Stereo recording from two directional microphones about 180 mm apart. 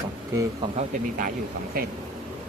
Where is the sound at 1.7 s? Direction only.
55° right (ahead or behind).